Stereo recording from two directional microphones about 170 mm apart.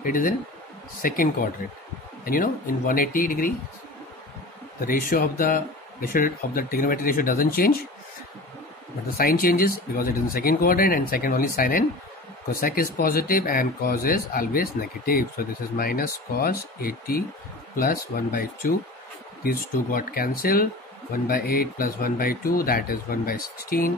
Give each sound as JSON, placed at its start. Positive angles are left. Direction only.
{"t": 0.0, "sound": "speech", "side_deg": 55}
{"t": 4.8, "sound": "speech", "side_deg": 55}
{"t": 9.1, "sound": "speech", "side_deg": 60}